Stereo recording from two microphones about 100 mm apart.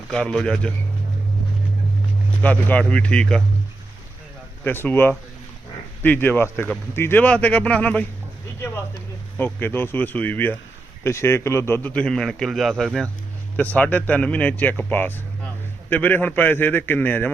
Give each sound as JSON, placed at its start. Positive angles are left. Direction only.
{"t": 0.1, "sound": "a man's voice", "side_deg": 10}
{"t": 2.4, "sound": "a man's voice", "side_deg": 15}
{"t": 4.6, "sound": "a man's voice", "side_deg": 20}
{"t": 9.4, "sound": "a man's voice", "side_deg": 20}
{"t": 13.6, "sound": "a man's voice", "side_deg": 15}